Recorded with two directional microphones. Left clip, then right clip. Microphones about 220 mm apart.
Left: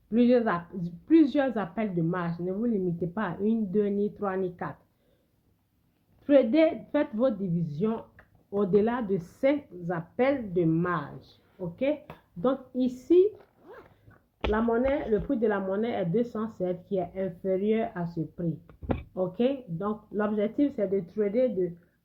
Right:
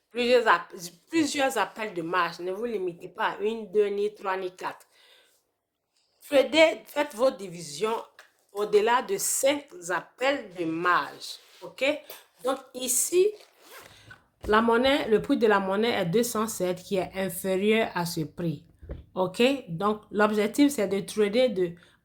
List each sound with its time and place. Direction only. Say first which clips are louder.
0.1 s speech: right 3 dB; 20° right (ahead or behind)
6.3 s speech: right 1 dB; 15° right (ahead or behind)
14.5 s speech: right 5 dB; 25° right (ahead or behind)